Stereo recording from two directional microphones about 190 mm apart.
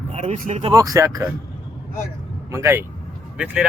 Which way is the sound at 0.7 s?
20° right (ahead or behind).